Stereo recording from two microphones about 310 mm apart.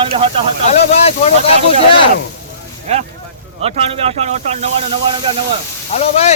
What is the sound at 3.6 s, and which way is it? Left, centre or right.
Speech, centre.